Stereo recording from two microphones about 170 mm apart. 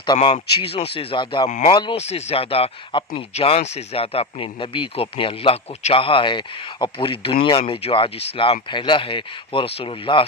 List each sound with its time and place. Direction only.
0.0 s speech: 30° left (ahead or behind)
1.5 s speech: 45° left (ahead or behind)
1.7 s speech: 25° left (ahead or behind)
2.0 s speech: 40° left (ahead or behind)